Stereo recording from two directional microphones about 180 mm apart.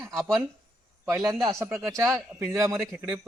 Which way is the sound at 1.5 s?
15° right (ahead or behind).